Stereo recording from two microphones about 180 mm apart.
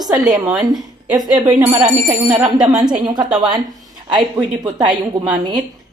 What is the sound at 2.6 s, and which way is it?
Speech, 25° right (ahead or behind).